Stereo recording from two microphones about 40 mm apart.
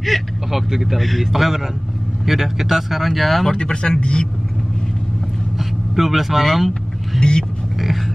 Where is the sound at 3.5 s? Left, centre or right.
Left.